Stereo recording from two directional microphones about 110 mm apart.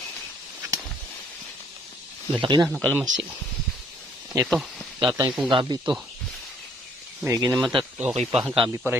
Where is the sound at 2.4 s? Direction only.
45° right (ahead or behind).